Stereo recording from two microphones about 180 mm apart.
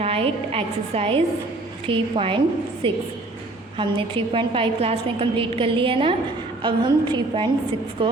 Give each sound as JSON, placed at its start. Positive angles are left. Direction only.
{"t": 0.0, "sound": "a woman's voice", "side_deg": -30}